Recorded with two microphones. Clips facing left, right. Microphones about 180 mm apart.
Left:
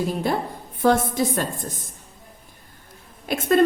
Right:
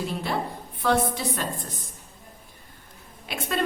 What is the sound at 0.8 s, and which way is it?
Speech, 45° left (ahead or behind).